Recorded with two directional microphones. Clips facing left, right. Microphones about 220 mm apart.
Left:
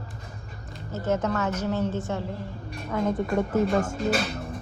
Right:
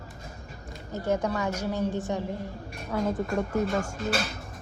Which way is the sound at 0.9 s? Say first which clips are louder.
Left 1 dB; 15° right (ahead or behind).